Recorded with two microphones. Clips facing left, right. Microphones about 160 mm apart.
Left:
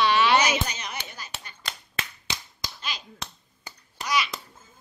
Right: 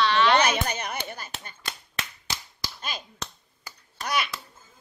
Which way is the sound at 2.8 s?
50° right (ahead or behind).